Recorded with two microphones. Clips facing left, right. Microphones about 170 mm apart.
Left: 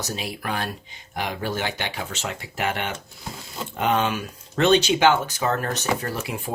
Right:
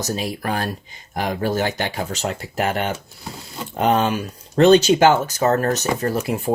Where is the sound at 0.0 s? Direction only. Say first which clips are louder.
Right 6 dB; 40° right (ahead or behind).